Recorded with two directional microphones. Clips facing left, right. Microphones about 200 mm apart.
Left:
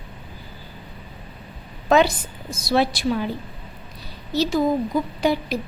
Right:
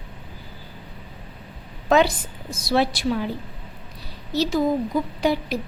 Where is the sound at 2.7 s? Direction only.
20° left (ahead or behind).